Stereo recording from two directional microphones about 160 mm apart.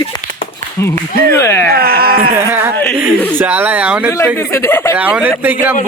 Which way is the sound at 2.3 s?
15° right (ahead or behind).